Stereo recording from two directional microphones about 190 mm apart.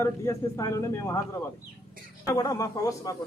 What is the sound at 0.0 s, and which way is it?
A man's voice, 15° left (ahead or behind).